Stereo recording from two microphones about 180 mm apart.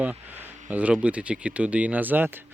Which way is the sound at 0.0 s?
10° right (ahead or behind).